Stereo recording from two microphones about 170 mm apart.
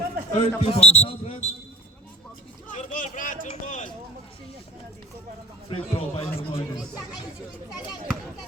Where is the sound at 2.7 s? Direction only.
50° left (ahead or behind).